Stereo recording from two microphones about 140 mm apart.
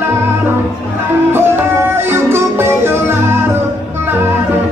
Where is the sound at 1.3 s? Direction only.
15° right (ahead or behind).